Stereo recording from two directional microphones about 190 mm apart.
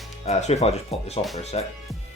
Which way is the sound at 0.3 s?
35° left (ahead or behind).